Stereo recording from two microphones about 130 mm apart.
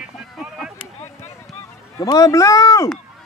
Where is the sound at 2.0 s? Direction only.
30° left (ahead or behind).